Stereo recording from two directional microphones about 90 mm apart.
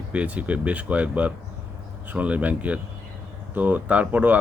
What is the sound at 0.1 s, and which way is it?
Speech, 15° right (ahead or behind).